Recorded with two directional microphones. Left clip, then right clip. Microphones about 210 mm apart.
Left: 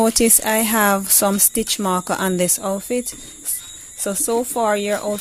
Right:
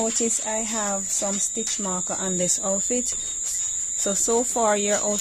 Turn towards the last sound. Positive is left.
turn(degrees=10)  # may be behind; listen again after turning